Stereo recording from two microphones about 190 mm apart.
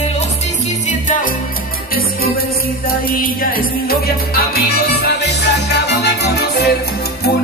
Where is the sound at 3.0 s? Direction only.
50° left (ahead or behind).